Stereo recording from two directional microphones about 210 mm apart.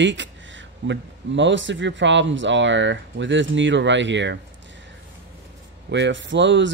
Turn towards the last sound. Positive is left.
turn(degrees=-60)  # may be behind; listen again after turning